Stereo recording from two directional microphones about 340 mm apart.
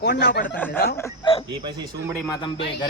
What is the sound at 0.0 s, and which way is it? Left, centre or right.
Speech, left.